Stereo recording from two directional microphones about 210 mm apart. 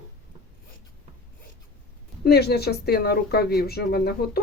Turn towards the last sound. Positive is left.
turn(degrees=50)  # may be behind; listen again after turning